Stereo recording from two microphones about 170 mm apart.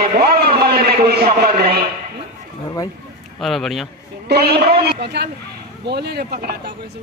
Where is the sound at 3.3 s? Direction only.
Centre (ahead or behind).